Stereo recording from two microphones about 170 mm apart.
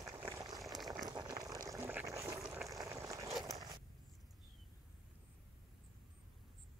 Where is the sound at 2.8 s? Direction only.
20° right (ahead or behind).